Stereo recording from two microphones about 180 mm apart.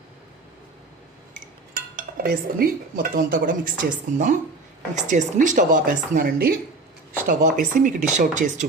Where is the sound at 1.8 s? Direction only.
55° right (ahead or behind).